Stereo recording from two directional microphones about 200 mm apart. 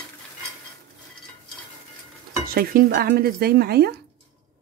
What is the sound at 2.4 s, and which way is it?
Speech, 50° right (ahead or behind).